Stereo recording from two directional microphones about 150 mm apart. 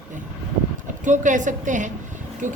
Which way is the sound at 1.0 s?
55° right (ahead or behind).